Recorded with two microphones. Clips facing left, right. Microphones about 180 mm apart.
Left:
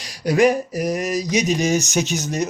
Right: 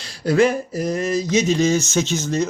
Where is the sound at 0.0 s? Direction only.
15° left (ahead or behind).